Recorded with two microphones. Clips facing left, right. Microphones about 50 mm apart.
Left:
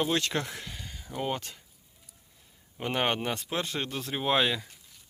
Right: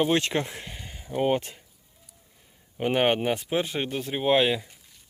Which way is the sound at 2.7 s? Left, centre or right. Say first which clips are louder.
Right 6 dB; centre.